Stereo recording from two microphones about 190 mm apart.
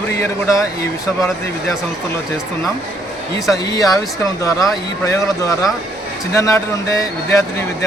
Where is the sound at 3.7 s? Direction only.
20° left (ahead or behind).